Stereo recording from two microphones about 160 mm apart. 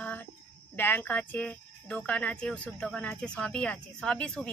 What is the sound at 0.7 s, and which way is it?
Speech, 10° left (ahead or behind).